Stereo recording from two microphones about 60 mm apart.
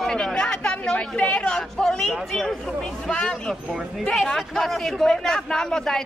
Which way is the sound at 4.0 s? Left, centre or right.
Centre.